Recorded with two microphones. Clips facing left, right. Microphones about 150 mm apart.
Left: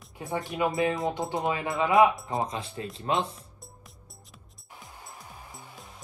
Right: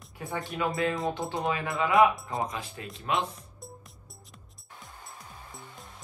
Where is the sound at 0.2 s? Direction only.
20° left (ahead or behind).